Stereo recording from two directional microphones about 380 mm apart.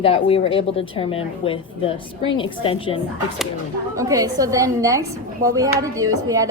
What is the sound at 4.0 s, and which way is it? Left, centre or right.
A woman's voice, centre.